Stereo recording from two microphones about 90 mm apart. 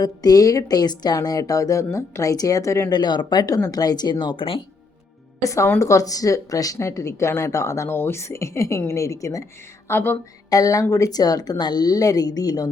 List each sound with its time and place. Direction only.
0.0 s speech: 45° left (ahead or behind)
2.9 s a woman's voice: 55° left (ahead or behind); by 4.6 s 80° left
5.4 s a woman's voice: 35° left (ahead or behind)
9.9 s a sound: 25° left (ahead or behind)
10.5 s a woman's voice: 40° left (ahead or behind)